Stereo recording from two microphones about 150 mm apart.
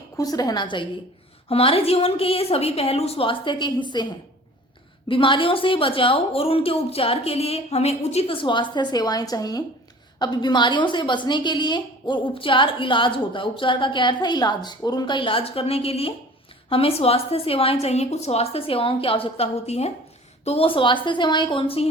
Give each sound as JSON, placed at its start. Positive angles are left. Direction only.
{"t": 0.2, "sound": "a woman's voice", "side_deg": 25}
{"t": 5.0, "sound": "a woman's voice", "side_deg": 35}